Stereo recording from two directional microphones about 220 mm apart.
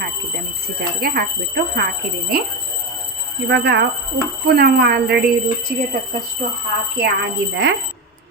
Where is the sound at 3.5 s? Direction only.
50° right (ahead or behind).